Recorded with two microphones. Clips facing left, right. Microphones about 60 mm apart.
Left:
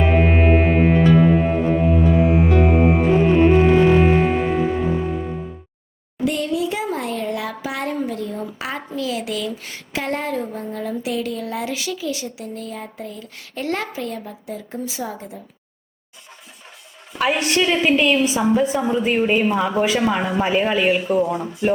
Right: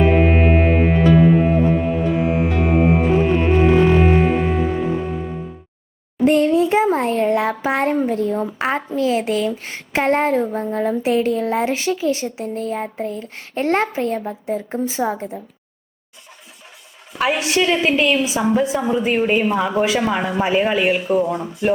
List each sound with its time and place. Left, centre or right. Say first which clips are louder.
0.0 s music: right 2 dB; centre
6.2 s a sound: right 7 dB; right
9.0 s a woman's voice: right 5 dB; right
17.2 s a woman's voice: right 1 dB; centre